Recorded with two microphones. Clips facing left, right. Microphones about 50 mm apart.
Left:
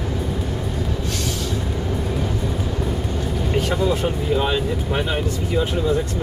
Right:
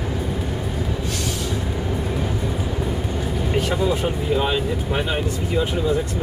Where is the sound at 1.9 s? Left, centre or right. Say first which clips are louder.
Left 1 dB; centre.